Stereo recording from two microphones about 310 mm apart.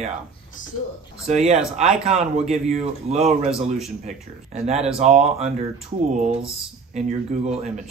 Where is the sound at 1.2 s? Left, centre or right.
Right.